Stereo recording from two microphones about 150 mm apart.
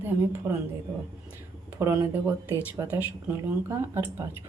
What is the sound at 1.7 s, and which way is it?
Speech, 15° right (ahead or behind).